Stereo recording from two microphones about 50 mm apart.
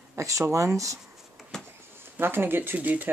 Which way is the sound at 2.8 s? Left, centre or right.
Right.